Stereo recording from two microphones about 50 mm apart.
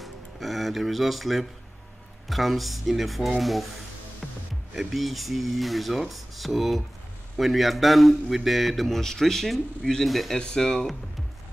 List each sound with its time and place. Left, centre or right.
0.0 s music: centre
2.2 s speech: centre
4.2 s music: right
4.7 s speech: centre
10.4 s speech: centre